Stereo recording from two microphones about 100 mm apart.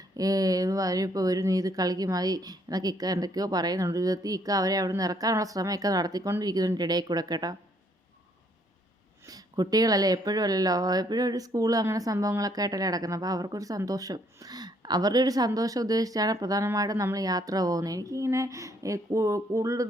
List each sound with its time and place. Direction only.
0.2 s speech: 35° right (ahead or behind)
9.3 s speech: 40° right (ahead or behind)